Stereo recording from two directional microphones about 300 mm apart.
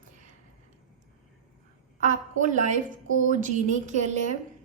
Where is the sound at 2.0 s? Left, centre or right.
Right.